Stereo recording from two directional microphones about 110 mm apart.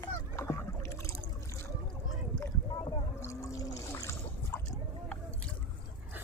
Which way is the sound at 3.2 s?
30° left (ahead or behind).